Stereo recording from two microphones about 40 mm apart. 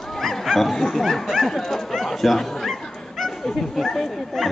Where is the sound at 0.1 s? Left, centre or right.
Centre.